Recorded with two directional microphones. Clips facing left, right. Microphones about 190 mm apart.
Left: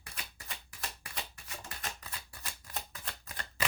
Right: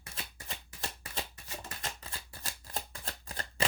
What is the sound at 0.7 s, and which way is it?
Shuffling cards, 25° right (ahead or behind).